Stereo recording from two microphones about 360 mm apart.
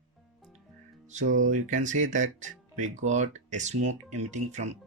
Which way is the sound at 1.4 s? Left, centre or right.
Right.